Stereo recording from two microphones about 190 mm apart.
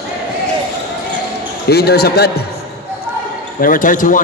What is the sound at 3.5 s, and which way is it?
Speech, 45° left (ahead or behind).